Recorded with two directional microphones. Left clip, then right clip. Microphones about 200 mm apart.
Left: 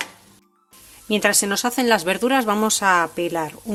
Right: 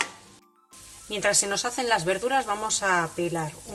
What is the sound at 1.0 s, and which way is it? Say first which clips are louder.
Speech: left 5 dB; 55° left (ahead or behind).